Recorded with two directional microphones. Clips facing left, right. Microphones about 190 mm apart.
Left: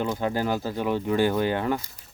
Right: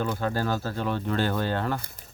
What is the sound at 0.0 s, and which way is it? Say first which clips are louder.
Speech: left 2 dB; 15° left (ahead or behind).